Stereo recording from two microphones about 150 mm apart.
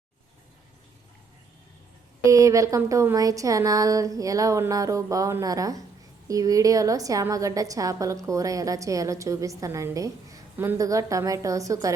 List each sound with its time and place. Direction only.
2.2 s a woman's voice: 20° right (ahead or behind)